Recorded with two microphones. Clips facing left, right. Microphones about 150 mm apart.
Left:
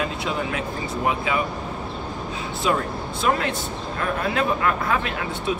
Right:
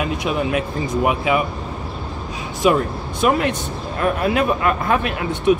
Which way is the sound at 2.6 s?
15° right (ahead or behind).